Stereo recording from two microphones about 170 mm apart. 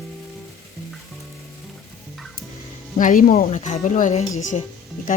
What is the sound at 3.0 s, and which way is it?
Speech, 55° left (ahead or behind).